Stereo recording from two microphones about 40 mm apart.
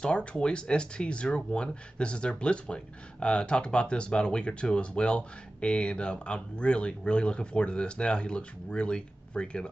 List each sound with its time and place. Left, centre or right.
0.0 s speech: left